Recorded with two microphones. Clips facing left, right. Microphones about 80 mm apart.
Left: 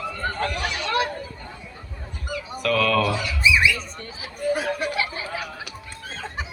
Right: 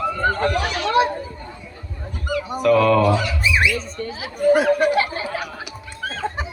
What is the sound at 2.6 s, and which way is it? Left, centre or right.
Speech, right.